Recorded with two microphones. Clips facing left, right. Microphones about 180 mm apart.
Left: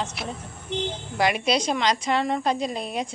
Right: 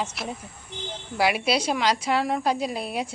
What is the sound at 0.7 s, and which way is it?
Speech, 75° left (ahead or behind).